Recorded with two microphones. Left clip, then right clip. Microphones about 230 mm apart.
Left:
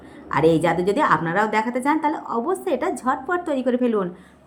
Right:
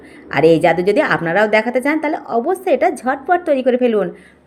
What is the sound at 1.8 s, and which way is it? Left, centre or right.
Speech, left.